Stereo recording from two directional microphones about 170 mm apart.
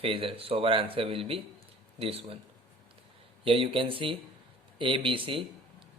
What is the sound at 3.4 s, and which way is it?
Speech, 30° right (ahead or behind).